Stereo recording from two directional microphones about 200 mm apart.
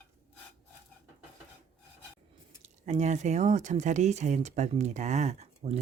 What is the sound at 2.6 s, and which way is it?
Speech, 35° right (ahead or behind).